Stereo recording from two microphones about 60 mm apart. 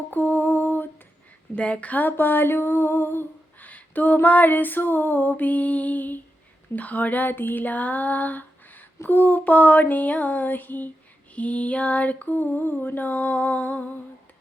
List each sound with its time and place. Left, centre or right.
0.1 s lullaby: left
1.5 s a sound: centre
6.7 s female singing: left